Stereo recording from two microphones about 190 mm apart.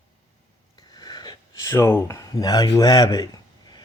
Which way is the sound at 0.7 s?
20° left (ahead or behind).